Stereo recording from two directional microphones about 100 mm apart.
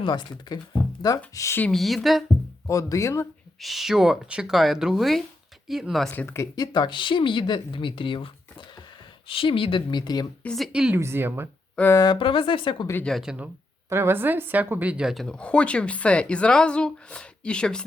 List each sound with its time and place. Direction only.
0.0 s speech: 50° left (ahead or behind)
1.0 s speech: 35° left (ahead or behind)
1.7 s speech: centre (ahead or behind)
2.6 s speech: 30° left (ahead or behind)
3.6 s speech: centre (ahead or behind)
6.1 s speech: 20° left (ahead or behind)
6.6 s speech: 45° left (ahead or behind)
10.4 s speech: 5° left (ahead or behind)
10.7 s speech: 10° right (ahead or behind)
10.9 s speech: 25° right (ahead or behind)
11.8 s a woman's voice: 10° left (ahead or behind)
12.1 s speech: 60° left (ahead or behind)
13.2 s a woman's voice: 15° right (ahead or behind); by 17.8 s 10° left (ahead or behind)